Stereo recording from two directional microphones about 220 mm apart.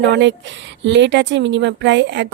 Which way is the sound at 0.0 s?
55° right (ahead or behind).